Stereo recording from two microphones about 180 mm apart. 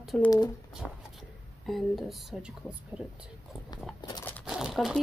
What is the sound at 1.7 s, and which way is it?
Speech, centre (ahead or behind).